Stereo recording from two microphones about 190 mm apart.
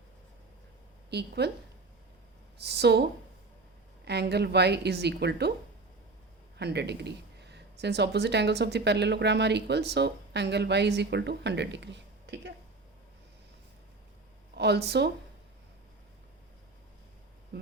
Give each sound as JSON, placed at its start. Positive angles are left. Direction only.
{"t": 1.1, "sound": "speech", "side_deg": -60}
{"t": 2.6, "sound": "speech", "side_deg": -60}
{"t": 6.6, "sound": "speech", "side_deg": -60}
{"t": 14.5, "sound": "speech", "side_deg": -60}